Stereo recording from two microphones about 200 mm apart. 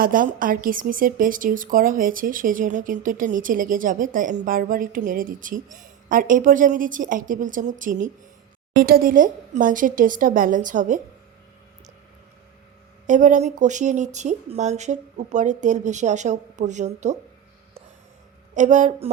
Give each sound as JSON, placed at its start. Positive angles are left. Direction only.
{"t": 0.0, "sound": "speech", "side_deg": -45}
{"t": 13.1, "sound": "speech", "side_deg": -40}
{"t": 18.5, "sound": "speech", "side_deg": -40}